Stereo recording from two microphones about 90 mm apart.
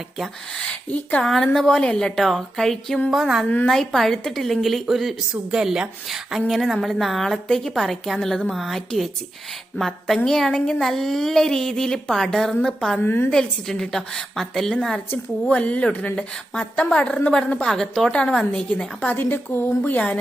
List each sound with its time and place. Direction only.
0.2 s a woman's voice: 10° left (ahead or behind)
1.2 s a woman's voice: 5° left (ahead or behind)
13.0 s a woman's voice: 25° left (ahead or behind)
13.3 s a woman's voice: 5° left (ahead or behind)
19.1 s a woman's voice: 20° left (ahead or behind)